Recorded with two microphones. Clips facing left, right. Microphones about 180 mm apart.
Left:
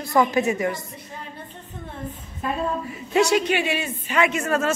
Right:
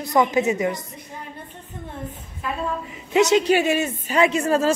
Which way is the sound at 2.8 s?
20° right (ahead or behind).